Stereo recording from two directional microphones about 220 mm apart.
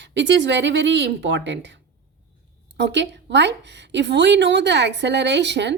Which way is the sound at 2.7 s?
50° right (ahead or behind).